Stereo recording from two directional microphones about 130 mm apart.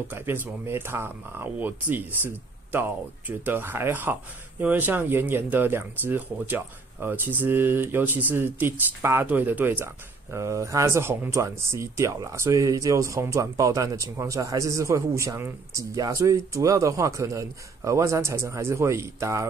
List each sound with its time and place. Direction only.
0.1 s speech: 15° right (ahead or behind)